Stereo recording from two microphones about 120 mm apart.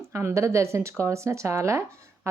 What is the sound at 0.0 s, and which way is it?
Speech, 20° right (ahead or behind).